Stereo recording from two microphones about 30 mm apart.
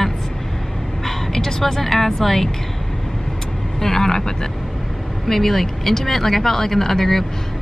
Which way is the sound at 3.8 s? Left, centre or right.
Centre.